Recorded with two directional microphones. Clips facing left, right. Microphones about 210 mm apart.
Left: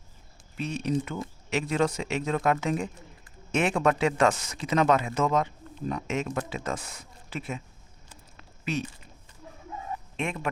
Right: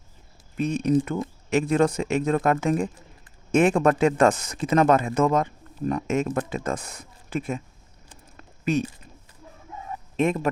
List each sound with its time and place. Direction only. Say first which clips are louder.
0.5 s speech: right 7 dB; 45° right (ahead or behind)
8.4 s a sound: right 7 dB; 50° right (ahead or behind)
10.2 s speech: right 9 dB; 40° right (ahead or behind)